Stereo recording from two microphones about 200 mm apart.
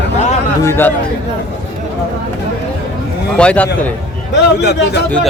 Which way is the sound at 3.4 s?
5° left (ahead or behind).